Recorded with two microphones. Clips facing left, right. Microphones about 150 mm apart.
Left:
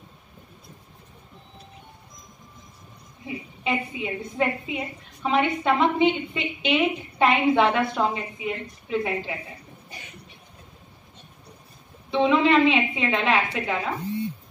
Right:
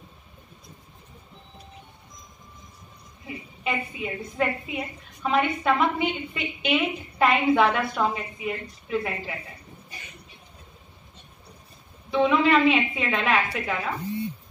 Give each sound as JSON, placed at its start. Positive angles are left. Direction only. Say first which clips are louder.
{"t": 3.6, "sound": "a woman's voice", "louder": "left 2 dB", "side_deg": 20}
{"t": 12.1, "sound": "a woman's voice", "louder": "left 1 dB", "side_deg": 20}